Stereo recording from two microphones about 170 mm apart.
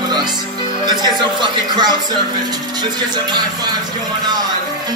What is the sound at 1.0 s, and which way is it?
Speech, 25° right (ahead or behind).